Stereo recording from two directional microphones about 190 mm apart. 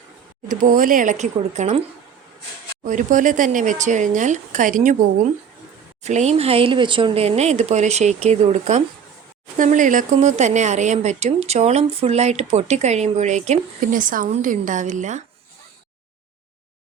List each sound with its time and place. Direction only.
0.4 s speech: 45° right (ahead or behind)
2.8 s speech: 40° right (ahead or behind)
6.0 s speech: 35° right (ahead or behind)